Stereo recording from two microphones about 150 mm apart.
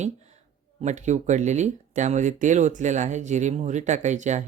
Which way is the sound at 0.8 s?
50° right (ahead or behind).